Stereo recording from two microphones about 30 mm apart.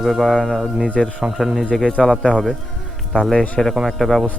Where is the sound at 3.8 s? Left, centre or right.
Centre.